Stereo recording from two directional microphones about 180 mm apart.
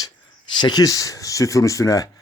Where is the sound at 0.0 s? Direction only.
25° left (ahead or behind).